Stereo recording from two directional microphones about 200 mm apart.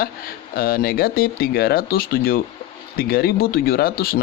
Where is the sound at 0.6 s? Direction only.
50° left (ahead or behind).